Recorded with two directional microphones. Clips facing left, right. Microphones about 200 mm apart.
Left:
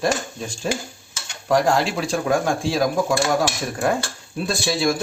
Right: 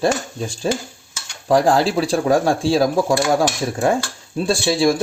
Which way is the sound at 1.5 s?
35° right (ahead or behind).